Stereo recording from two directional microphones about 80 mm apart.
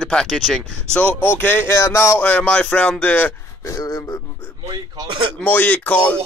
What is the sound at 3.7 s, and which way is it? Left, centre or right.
Speech, left.